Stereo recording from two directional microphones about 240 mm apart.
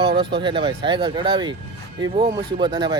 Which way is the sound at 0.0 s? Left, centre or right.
Right.